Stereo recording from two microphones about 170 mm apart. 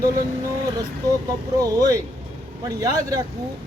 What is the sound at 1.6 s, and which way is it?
Speech, 20° right (ahead or behind).